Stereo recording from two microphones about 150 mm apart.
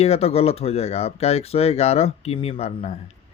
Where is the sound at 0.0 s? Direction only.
45° left (ahead or behind).